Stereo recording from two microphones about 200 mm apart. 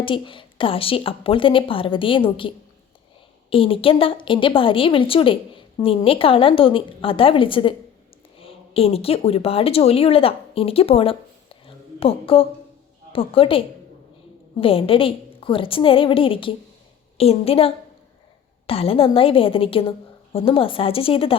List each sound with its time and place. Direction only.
0.0 s a woman's voice: 25° left (ahead or behind)
3.5 s a woman's voice: 25° left (ahead or behind)
11.6 s a sound: 30° left (ahead or behind)
13.1 s a woman's voice: 25° left (ahead or behind)